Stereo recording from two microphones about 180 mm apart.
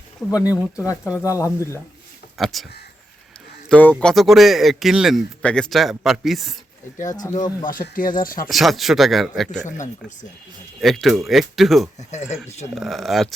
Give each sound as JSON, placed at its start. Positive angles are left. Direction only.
{"t": 0.3, "sound": "speech", "side_deg": 20}
{"t": 2.4, "sound": "a man's voice", "side_deg": 0}
{"t": 3.7, "sound": "a man's voice", "side_deg": 5}
{"t": 7.1, "sound": "speech", "side_deg": 20}
{"t": 7.6, "sound": "speech", "side_deg": 50}
{"t": 8.4, "sound": "a man's voice", "side_deg": 0}
{"t": 9.6, "sound": "speech", "side_deg": 45}
{"t": 10.8, "sound": "a man's voice", "side_deg": 0}
{"t": 11.9, "sound": "speech", "side_deg": 40}
{"t": 12.7, "sound": "a man's voice", "side_deg": 0}